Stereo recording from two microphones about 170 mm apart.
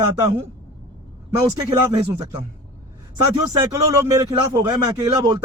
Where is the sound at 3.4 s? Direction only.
20° right (ahead or behind).